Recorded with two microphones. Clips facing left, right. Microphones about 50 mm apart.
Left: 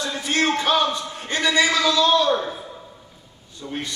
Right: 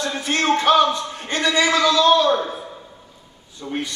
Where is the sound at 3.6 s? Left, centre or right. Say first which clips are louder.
Right 3 dB; centre.